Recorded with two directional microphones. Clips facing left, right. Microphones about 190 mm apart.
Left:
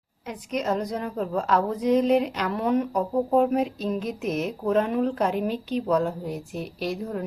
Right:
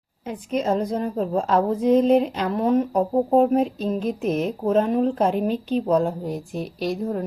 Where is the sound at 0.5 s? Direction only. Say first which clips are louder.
Right 4 dB; 30° right (ahead or behind).